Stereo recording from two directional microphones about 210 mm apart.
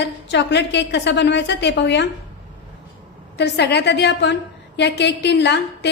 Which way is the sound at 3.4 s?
55° left (ahead or behind).